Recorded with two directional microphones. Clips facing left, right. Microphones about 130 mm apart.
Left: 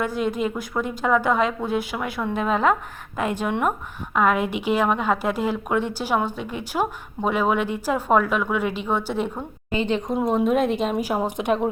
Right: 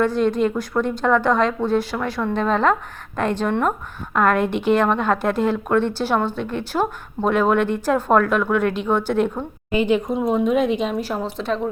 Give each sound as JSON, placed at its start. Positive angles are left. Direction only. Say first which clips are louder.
{"t": 0.0, "sound": "a woman's voice", "louder": "right 5 dB", "side_deg": 5}
{"t": 9.7, "sound": "speech", "louder": "right 4 dB", "side_deg": -10}
{"t": 10.2, "sound": "a woman's voice", "louder": "right 1 dB", "side_deg": 0}